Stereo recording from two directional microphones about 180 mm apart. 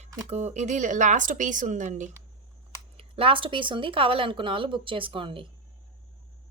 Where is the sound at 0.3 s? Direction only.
35° right (ahead or behind).